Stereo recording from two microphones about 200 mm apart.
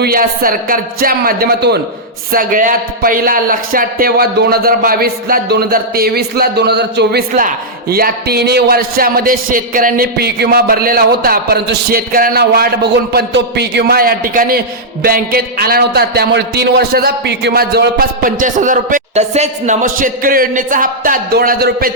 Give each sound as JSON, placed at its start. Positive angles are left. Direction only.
{"t": 0.0, "sound": "a man's voice", "side_deg": -45}